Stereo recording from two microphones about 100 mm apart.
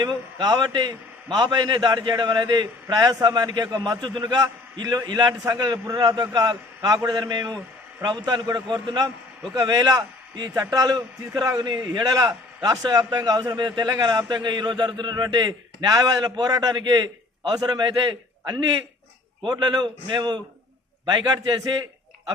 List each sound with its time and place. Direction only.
0.0 s a man's voice: 45° right (ahead or behind)
2.8 s a man's voice: 35° right (ahead or behind)
19.5 s a man's voice: 45° right (ahead or behind)